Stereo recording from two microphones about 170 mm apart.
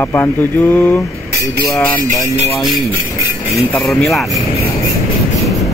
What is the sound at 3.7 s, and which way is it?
Speech, 5° left (ahead or behind).